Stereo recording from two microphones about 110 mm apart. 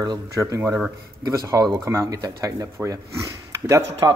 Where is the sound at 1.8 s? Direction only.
30° right (ahead or behind).